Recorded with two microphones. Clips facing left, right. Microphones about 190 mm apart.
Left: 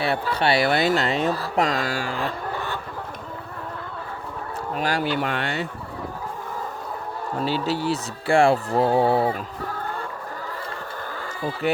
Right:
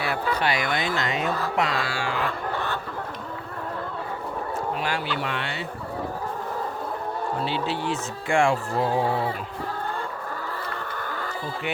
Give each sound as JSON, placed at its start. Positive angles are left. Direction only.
{"t": 0.0, "sound": "speech", "side_deg": 30}
{"t": 4.8, "sound": "speech", "side_deg": 40}
{"t": 7.4, "sound": "speech", "side_deg": 40}